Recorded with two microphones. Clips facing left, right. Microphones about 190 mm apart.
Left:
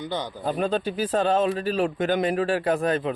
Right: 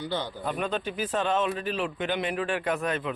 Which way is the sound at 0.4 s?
30° left (ahead or behind).